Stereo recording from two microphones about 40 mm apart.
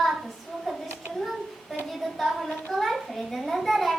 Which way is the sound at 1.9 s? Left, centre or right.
Centre.